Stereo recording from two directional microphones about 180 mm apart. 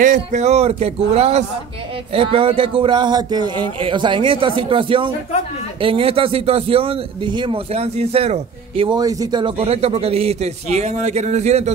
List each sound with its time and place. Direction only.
0.0 s a man's voice: 40° right (ahead or behind)